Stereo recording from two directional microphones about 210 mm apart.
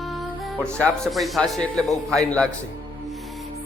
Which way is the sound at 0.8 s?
Centre (ahead or behind).